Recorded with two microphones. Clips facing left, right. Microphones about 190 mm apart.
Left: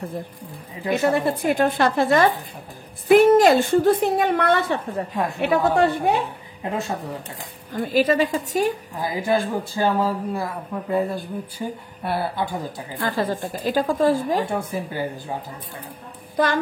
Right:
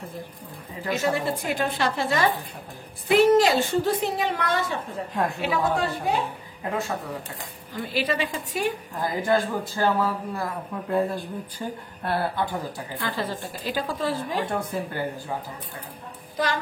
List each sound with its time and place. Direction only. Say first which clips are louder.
0.9 s a woman's voice: left 5 dB; 55° left (ahead or behind)
5.1 s a woman's voice: right 2 dB; centre (ahead or behind)
5.4 s a woman's voice: left 9 dB; 60° left (ahead or behind)
6.6 s speech: left 2 dB; 25° left (ahead or behind)
7.7 s a woman's voice: left 7 dB; 45° left (ahead or behind)
8.9 s speech: left 1 dB; 10° left (ahead or behind)
13.0 s a woman's voice: left 6 dB; 50° left (ahead or behind)
14.5 s speech: left 2 dB; 10° left (ahead or behind)